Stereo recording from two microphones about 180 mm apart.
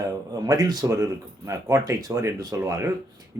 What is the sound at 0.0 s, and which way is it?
Speech, 20° right (ahead or behind).